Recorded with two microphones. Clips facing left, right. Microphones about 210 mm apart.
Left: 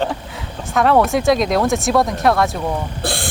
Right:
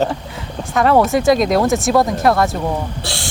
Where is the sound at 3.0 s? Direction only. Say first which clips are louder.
Left 4 dB; 55° left (ahead or behind).